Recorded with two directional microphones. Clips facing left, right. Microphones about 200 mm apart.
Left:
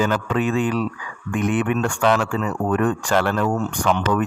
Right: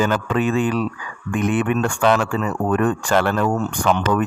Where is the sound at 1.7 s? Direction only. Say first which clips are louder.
Right 1 dB; 40° right (ahead or behind).